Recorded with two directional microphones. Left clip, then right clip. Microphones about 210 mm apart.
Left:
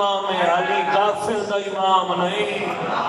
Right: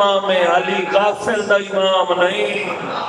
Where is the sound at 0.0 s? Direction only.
45° right (ahead or behind).